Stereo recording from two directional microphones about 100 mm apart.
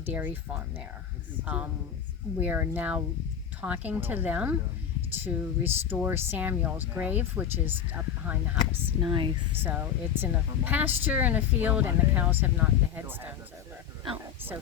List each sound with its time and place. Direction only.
0.0 s speech: 20° right (ahead or behind)
1.5 s speech: 15° right (ahead or behind)
9.0 s speech: 50° right (ahead or behind)
9.6 s speech: 20° right (ahead or behind)